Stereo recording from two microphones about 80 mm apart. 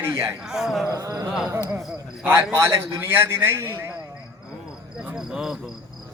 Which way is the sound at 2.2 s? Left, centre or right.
Right.